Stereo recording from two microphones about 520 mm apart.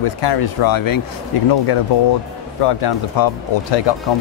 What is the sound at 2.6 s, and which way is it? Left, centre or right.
Speech, left.